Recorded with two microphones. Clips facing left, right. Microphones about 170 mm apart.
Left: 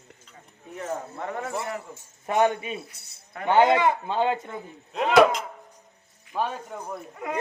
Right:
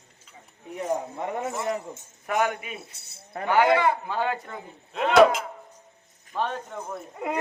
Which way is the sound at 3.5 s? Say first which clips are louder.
Left 1 dB; 25° left (ahead or behind).